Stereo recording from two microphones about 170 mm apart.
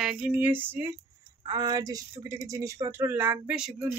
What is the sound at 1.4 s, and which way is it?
Speech, 25° right (ahead or behind).